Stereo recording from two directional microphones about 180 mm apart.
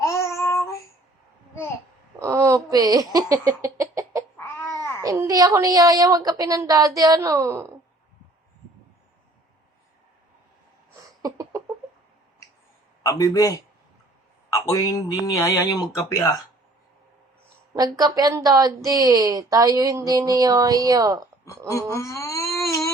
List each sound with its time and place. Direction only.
0.0 s child singing: 15° left (ahead or behind)
2.1 s giggle: 15° right (ahead or behind)
4.4 s a sound: 15° left (ahead or behind)
5.0 s a woman's voice: 15° right (ahead or behind)
11.2 s a sound: 20° right (ahead or behind)
13.0 s a man's voice: 15° left (ahead or behind)
14.7 s speech: 20° left (ahead or behind)
17.7 s a woman's voice: 20° right (ahead or behind)
21.9 s a sound: 15° left (ahead or behind)